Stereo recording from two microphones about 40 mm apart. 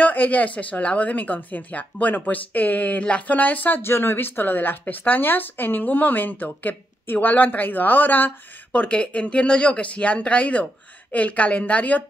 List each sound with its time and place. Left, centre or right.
0.0 s speech: left
3.0 s speech: left
3.3 s speech: left
3.8 s speech: left
8.7 s speech: left